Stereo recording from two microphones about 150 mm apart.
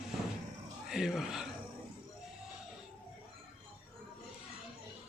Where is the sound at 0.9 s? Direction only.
Centre (ahead or behind).